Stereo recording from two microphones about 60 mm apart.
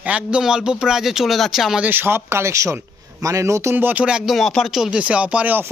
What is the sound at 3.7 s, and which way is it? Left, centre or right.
Speech, right.